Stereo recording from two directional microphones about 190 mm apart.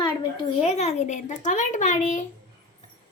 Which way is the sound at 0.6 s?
35° left (ahead or behind).